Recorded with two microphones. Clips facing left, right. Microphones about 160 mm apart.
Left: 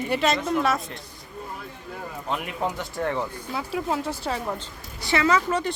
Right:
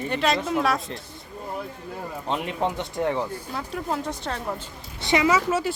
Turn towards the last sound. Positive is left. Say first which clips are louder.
# right 1 dB
turn(degrees=-5)  # may be behind; listen again after turning